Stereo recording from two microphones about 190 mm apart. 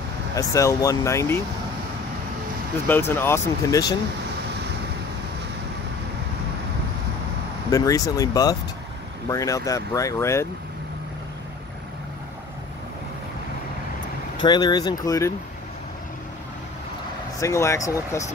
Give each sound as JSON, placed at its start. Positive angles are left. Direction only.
{"t": 0.4, "sound": "speech", "side_deg": 15}
{"t": 2.9, "sound": "speech", "side_deg": 10}
{"t": 7.7, "sound": "speech", "side_deg": 20}
{"t": 14.4, "sound": "speech", "side_deg": 20}
{"t": 17.4, "sound": "speech", "side_deg": 15}